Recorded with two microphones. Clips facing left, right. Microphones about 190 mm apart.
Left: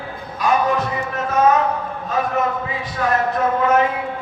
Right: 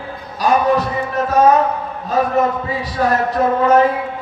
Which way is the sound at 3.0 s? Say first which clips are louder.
Right 3 dB; 35° right (ahead or behind).